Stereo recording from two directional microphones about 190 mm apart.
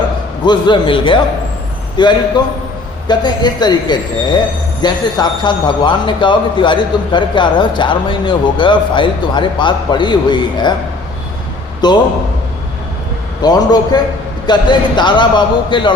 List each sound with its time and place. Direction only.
0.4 s speech: 25° left (ahead or behind)
11.8 s speech: 20° left (ahead or behind)
13.4 s speech: 20° left (ahead or behind)